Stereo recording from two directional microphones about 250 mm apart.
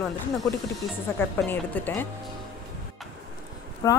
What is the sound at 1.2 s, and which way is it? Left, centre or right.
Speech, centre.